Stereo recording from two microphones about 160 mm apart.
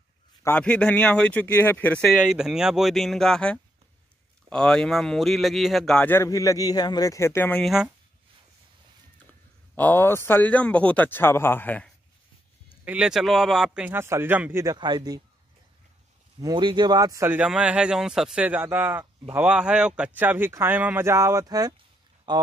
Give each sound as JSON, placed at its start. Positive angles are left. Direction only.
{"t": 0.4, "sound": "speech", "side_deg": 10}
{"t": 2.1, "sound": "speech", "side_deg": -5}
{"t": 7.6, "sound": "speech", "side_deg": 0}
{"t": 9.8, "sound": "speech", "side_deg": 10}
{"t": 12.8, "sound": "a man's voice", "side_deg": -5}
{"t": 16.3, "sound": "speech", "side_deg": -25}
{"t": 17.3, "sound": "a man's voice", "side_deg": -5}